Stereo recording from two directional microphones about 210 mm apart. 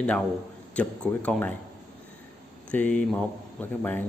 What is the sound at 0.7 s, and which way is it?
Speech, 5° left (ahead or behind).